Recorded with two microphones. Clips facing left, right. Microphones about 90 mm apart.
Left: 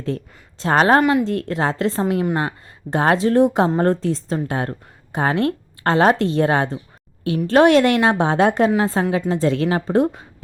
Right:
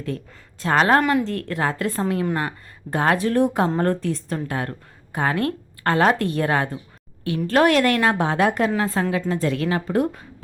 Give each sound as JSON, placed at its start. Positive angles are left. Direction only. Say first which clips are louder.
{"t": 0.6, "sound": "a woman's voice", "louder": "left 3 dB", "side_deg": 30}
{"t": 1.0, "sound": "a woman's voice", "louder": "left 3 dB", "side_deg": 15}